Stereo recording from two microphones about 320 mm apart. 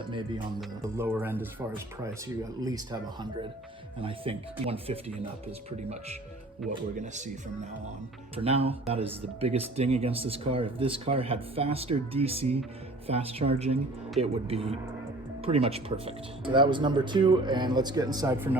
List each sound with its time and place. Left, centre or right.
0.0 s speech: centre